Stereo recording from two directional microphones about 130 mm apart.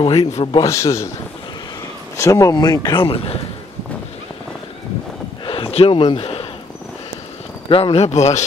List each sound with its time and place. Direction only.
0.0 s a man's voice: 40° left (ahead or behind)
0.7 s speech: 20° left (ahead or behind)
2.1 s speech: 25° left (ahead or behind)
3.0 s a man's voice: 45° left (ahead or behind)
5.4 s a sound: 45° left (ahead or behind)
7.7 s speech: 50° left (ahead or behind)